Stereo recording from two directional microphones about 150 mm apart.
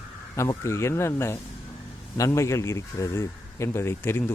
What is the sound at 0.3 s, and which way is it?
Speech, 20° left (ahead or behind).